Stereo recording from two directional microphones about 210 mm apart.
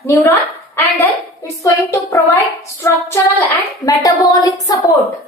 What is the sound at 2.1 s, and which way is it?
A child's voice, 10° left (ahead or behind).